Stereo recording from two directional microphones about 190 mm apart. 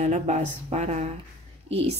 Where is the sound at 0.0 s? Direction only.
35° right (ahead or behind).